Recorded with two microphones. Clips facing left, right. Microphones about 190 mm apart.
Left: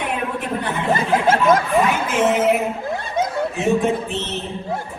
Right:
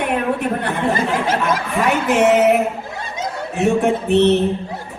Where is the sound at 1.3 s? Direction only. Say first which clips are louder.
Left 4 dB; 50° left (ahead or behind).